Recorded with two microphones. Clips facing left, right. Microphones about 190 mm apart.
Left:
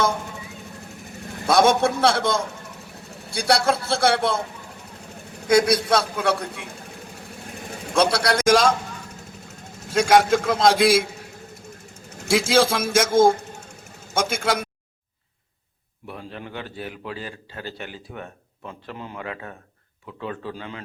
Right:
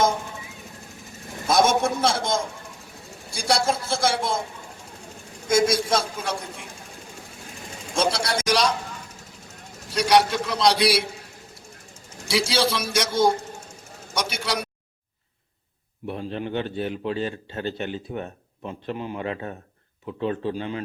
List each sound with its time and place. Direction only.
1.5 s a man's voice: 65° left (ahead or behind)
5.5 s a man's voice: 65° left (ahead or behind)
7.9 s a man's voice: 60° left (ahead or behind)
9.9 s a man's voice: 50° left (ahead or behind)
12.3 s a man's voice: 50° left (ahead or behind)
16.0 s a man's voice: 25° right (ahead or behind)